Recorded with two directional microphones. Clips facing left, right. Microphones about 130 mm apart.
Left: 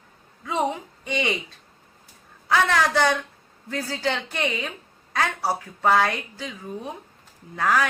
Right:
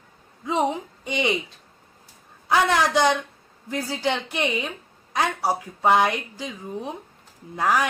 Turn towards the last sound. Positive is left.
turn(degrees=-20)  # may be behind; listen again after turning